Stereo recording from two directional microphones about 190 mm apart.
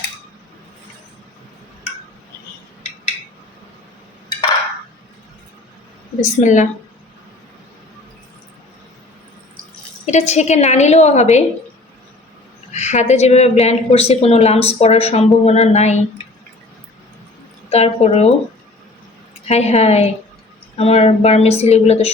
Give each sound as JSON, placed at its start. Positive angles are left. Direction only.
{"t": 6.2, "sound": "a woman's voice", "side_deg": 40}
{"t": 10.1, "sound": "a woman's voice", "side_deg": 35}
{"t": 12.7, "sound": "a woman's voice", "side_deg": 35}
{"t": 17.7, "sound": "a woman's voice", "side_deg": 35}
{"t": 19.5, "sound": "a woman's voice", "side_deg": 35}